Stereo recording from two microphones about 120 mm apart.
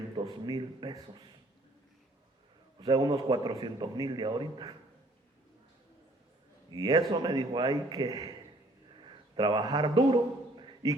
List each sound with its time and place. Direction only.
0.2 s a man's voice: 40° right (ahead or behind)
2.8 s a man's voice: 35° right (ahead or behind)
6.7 s a man's voice: 35° right (ahead or behind)
9.0 s a sound: 40° right (ahead or behind)